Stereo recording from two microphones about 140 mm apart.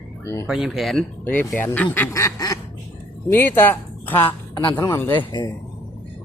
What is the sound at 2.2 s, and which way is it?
Quack, 25° left (ahead or behind).